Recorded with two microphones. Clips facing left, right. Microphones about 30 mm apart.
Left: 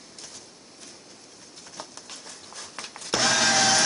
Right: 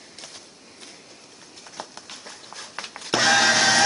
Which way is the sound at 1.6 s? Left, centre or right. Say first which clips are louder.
Right 3 dB; centre.